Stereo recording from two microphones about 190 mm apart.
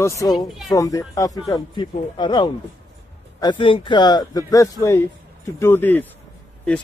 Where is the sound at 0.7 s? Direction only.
15° left (ahead or behind).